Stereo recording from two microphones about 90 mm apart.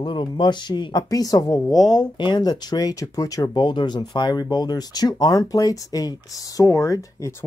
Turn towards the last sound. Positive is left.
turn(degrees=35)  # may be behind; listen again after turning